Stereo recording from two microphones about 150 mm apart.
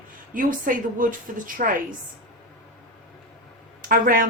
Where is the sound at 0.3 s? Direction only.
65° right (ahead or behind).